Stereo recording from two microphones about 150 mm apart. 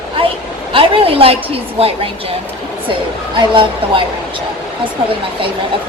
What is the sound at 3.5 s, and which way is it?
Speech, 35° right (ahead or behind).